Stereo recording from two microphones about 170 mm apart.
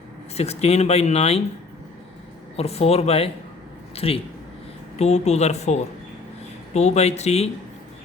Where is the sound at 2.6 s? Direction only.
35° left (ahead or behind).